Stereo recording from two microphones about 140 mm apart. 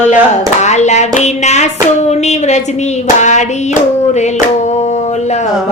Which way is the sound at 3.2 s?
60° left (ahead or behind).